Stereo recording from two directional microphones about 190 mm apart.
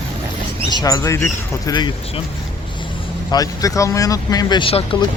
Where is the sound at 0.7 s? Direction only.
20° left (ahead or behind).